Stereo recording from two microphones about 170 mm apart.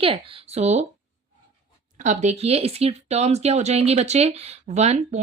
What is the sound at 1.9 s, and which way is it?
Speech, 45° right (ahead or behind).